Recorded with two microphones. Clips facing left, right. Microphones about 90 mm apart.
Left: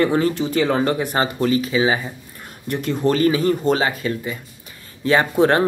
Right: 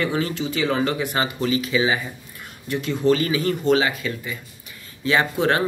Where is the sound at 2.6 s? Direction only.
45° left (ahead or behind).